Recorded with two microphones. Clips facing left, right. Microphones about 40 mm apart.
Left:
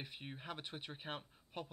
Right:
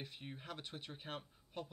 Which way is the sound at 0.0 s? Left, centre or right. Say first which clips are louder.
Left 1 dB; centre.